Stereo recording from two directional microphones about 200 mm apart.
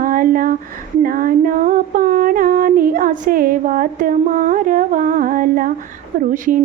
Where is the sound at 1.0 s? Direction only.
45° right (ahead or behind).